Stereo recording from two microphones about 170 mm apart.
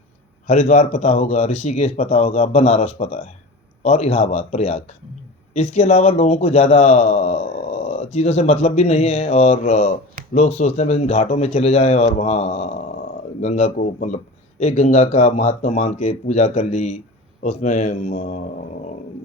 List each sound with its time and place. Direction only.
0.4 s speech: 45° left (ahead or behind)